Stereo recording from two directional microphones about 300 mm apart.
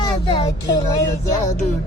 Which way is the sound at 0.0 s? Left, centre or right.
Centre.